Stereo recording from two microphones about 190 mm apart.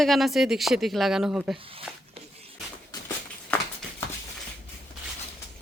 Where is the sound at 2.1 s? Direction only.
30° right (ahead or behind).